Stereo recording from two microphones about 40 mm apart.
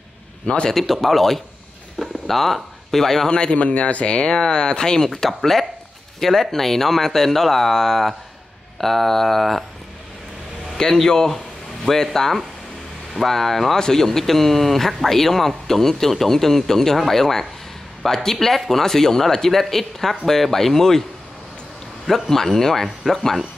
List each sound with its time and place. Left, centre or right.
0.7 s speech: centre
3.3 s speech: left; by 9.7 s centre
10.8 s speech: centre
22.0 s speech: centre